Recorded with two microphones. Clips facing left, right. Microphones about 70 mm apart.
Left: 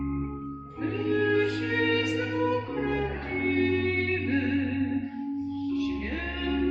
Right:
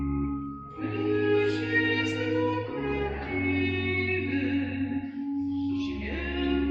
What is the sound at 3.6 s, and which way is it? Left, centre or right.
Music, left.